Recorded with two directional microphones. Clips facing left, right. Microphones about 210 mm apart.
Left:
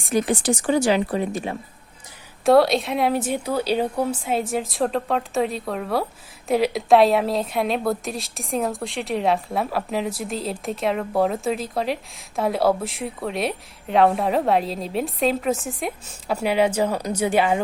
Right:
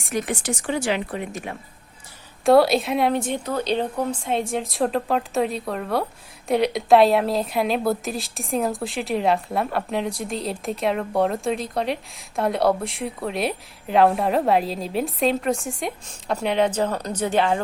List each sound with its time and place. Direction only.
0.1 s speech: 35° left (ahead or behind)
2.4 s a woman's voice: centre (ahead or behind)